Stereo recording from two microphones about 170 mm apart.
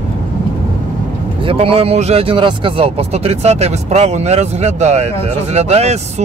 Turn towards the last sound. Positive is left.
turn(degrees=-40)  # may be behind; listen again after turning